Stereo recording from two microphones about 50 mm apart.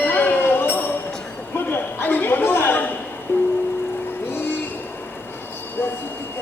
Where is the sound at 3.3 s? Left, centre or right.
Left.